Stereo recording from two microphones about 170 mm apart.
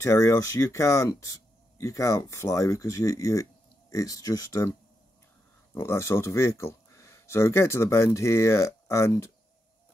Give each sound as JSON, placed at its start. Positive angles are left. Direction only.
{"t": 0.0, "sound": "speech", "side_deg": 15}
{"t": 5.8, "sound": "speech", "side_deg": 15}